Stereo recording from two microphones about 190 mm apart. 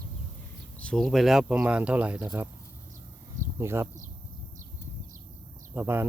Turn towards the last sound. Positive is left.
turn(degrees=-10)  # may be behind; listen again after turning